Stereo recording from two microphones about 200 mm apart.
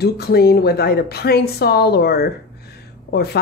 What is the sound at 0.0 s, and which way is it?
Speech, 50° left (ahead or behind).